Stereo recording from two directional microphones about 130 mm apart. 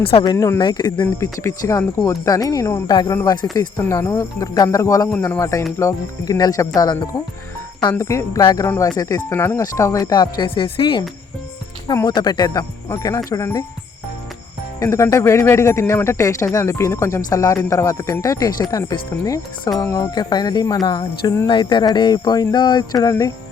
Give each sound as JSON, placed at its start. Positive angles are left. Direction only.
{"t": 0.0, "sound": "speech", "side_deg": 45}
{"t": 0.3, "sound": "speech", "side_deg": 20}
{"t": 0.6, "sound": "cricket", "side_deg": 30}
{"t": 1.0, "sound": "speech", "side_deg": 20}
{"t": 14.8, "sound": "speech", "side_deg": 20}
{"t": 19.8, "sound": "cricket", "side_deg": 30}